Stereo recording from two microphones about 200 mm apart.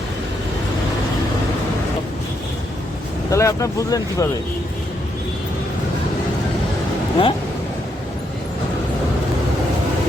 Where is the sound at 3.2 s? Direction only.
15° left (ahead or behind).